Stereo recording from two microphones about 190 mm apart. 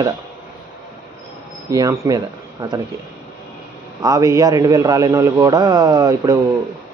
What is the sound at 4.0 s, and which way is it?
Speech, 15° right (ahead or behind).